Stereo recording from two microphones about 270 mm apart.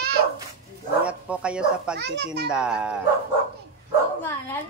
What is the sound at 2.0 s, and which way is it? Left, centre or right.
Speech, right.